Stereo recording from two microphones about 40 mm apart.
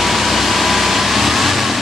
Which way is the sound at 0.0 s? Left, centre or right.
Centre.